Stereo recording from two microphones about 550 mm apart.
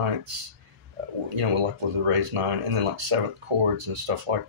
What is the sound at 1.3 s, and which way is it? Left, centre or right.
Speech, right.